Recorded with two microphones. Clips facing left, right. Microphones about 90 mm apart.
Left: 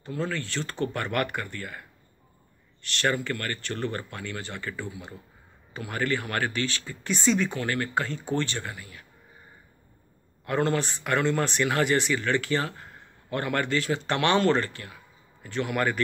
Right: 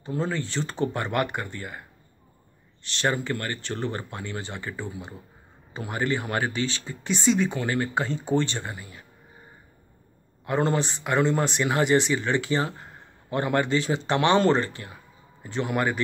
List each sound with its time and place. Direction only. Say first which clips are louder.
0.0 s speech: right 3 dB; 20° right (ahead or behind)
10.4 s speech: right 1 dB; 20° right (ahead or behind)